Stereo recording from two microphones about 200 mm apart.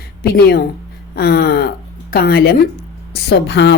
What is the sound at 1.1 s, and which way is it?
A woman's voice, 55° left (ahead or behind).